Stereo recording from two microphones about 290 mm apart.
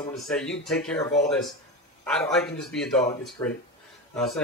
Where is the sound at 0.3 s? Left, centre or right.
Centre.